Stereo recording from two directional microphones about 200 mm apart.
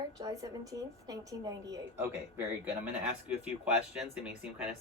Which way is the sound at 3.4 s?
5° right (ahead or behind).